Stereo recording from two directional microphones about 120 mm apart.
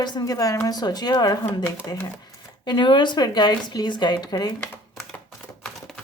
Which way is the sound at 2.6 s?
40° left (ahead or behind).